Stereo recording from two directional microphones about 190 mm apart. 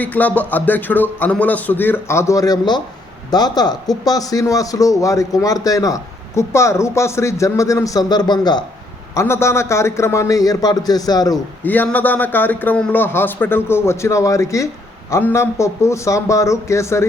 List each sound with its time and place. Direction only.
0.0 s a man's voice: 10° left (ahead or behind)
11.6 s a man's voice: 10° left (ahead or behind)